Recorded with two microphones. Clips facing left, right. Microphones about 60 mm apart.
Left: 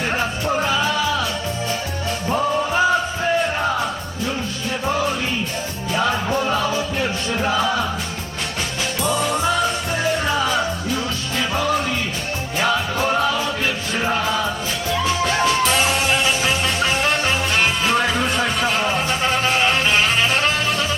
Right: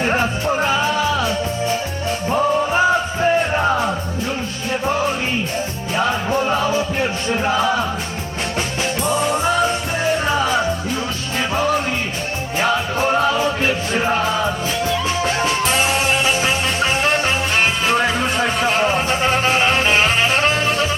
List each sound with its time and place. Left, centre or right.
0.6 s music: right
2.2 s music: right
5.9 s music: right
9.0 s music: right
15.0 s music: right